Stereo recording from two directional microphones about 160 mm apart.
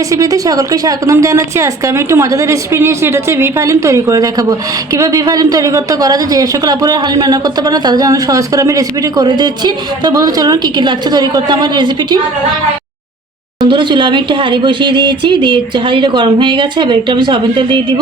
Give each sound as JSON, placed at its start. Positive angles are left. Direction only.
{"t": 0.1, "sound": "speech", "side_deg": -20}
{"t": 13.6, "sound": "speech", "side_deg": -30}